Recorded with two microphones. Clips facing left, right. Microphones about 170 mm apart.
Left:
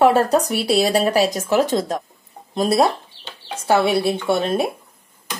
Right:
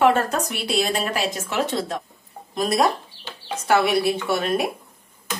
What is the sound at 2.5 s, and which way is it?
Speech, 30° left (ahead or behind).